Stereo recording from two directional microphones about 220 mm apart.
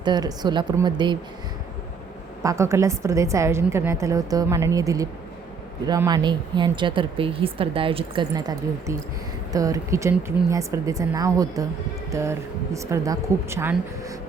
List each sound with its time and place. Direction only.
0.0 s speech: 20° right (ahead or behind)
2.4 s a woman's voice: 15° right (ahead or behind)